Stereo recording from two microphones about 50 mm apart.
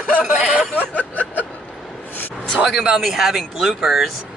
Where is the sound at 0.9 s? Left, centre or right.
Left.